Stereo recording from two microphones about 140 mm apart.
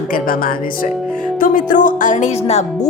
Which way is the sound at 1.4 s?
75° left (ahead or behind).